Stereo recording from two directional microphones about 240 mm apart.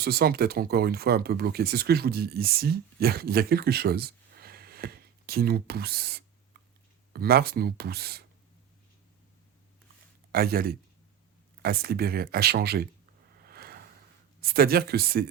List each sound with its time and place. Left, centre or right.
0.0 s speech: right
10.3 s speech: right
13.4 s a sound: right
14.4 s speech: right